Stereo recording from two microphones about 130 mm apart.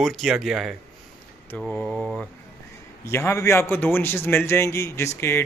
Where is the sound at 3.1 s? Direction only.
20° left (ahead or behind).